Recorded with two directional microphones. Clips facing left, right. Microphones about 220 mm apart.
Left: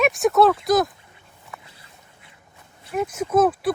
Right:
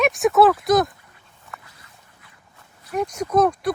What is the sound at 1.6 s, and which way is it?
Dog, 25° left (ahead or behind).